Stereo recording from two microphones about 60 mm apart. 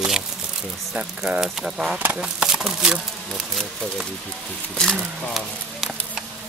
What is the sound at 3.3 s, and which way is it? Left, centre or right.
Speech, centre.